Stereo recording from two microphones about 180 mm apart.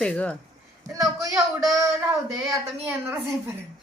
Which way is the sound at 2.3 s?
15° right (ahead or behind).